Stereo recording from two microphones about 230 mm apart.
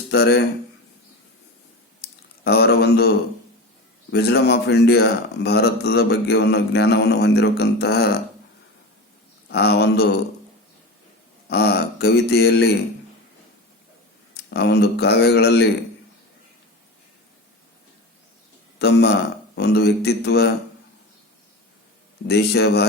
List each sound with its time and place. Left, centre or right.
0.1 s speech: left
2.0 s a sound: left
4.1 s speech: left
9.5 s speech: left
11.4 s speech: left
14.5 s speech: left
18.8 s speech: left
22.3 s speech: left